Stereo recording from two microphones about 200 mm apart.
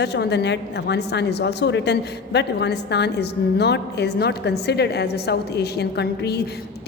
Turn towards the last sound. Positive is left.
turn(degrees=55)  # may be behind; listen again after turning